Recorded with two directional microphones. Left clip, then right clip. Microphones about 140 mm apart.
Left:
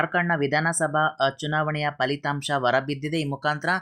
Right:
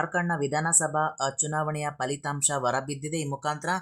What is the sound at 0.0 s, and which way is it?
Speech, 20° left (ahead or behind).